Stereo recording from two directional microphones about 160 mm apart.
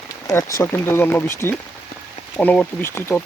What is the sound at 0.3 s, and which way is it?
Speech, 20° left (ahead or behind).